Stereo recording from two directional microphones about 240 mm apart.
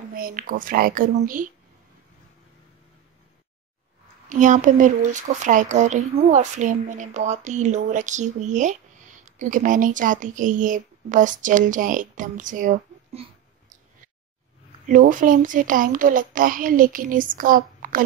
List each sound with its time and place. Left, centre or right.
0.1 s speech: right
4.3 s speech: right
14.9 s speech: right